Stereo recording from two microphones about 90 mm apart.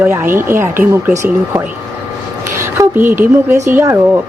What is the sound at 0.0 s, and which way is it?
A woman's voice, 25° right (ahead or behind).